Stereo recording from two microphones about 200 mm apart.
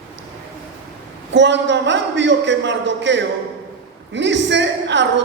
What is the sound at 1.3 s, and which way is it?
A man's voice, 65° right (ahead or behind).